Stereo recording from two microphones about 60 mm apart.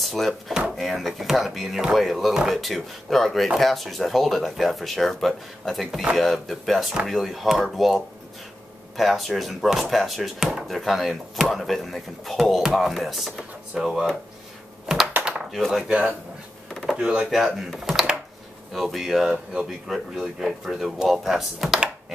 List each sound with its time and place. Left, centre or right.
0.0 s dishes: centre
0.7 s speech: centre
16.9 s speech: centre
19.2 s speech: centre
19.9 s speech: centre